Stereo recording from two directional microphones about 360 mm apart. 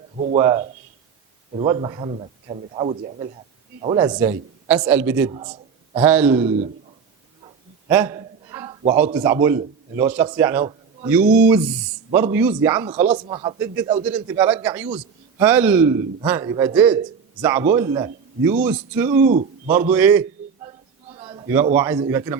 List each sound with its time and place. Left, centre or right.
0.3 s a man's voice: centre
7.9 s a sound: centre
9.1 s a man's voice: centre
19.3 s a man's voice: centre
19.9 s a man's voice: centre
21.2 s a sound: centre
21.8 s a man's voice: centre